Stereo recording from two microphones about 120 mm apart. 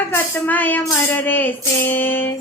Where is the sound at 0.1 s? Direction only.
15° left (ahead or behind).